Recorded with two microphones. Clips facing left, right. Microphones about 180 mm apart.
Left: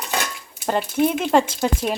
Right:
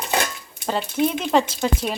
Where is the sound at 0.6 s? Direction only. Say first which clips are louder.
Left 2 dB; 10° left (ahead or behind).